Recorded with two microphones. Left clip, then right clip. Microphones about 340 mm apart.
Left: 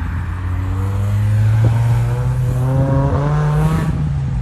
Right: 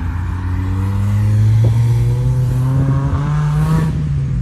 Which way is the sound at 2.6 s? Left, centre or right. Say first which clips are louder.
Left 5 dB; right.